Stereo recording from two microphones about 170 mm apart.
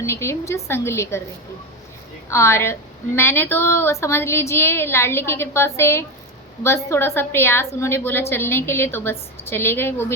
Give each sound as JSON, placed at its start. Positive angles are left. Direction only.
{"t": 0.0, "sound": "a woman's voice", "side_deg": 15}
{"t": 2.3, "sound": "a woman's voice", "side_deg": 15}